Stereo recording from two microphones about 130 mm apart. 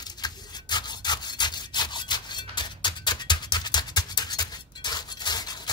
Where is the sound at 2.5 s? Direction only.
35° left (ahead or behind).